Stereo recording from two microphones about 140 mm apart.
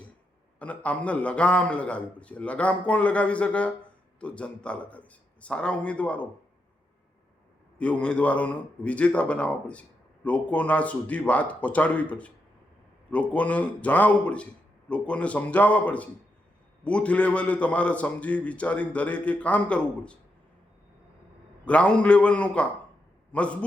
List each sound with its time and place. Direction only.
0.6 s a man's voice: 10° left (ahead or behind)
7.8 s a man's voice: 10° left (ahead or behind)
21.6 s a man's voice: 10° left (ahead or behind)